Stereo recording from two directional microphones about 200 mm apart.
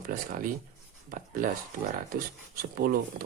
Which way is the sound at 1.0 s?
45° right (ahead or behind).